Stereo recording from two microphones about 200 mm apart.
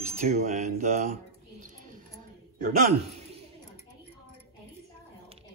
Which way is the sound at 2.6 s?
40° right (ahead or behind).